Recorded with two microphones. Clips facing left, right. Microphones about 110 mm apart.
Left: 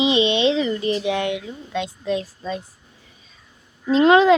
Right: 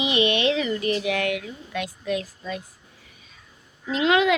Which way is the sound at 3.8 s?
30° left (ahead or behind).